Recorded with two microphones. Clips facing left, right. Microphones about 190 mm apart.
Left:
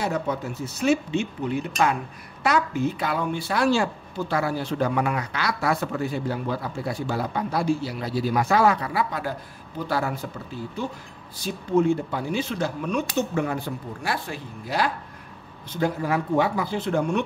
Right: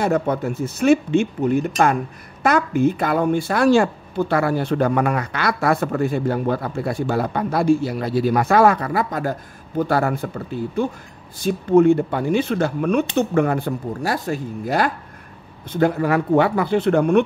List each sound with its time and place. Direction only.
0.0 s a woman's voice: 55° right (ahead or behind)
15.7 s speech: 60° right (ahead or behind)